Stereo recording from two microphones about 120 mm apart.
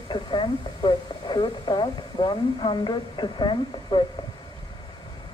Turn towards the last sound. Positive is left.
turn(degrees=40)  # may be behind; listen again after turning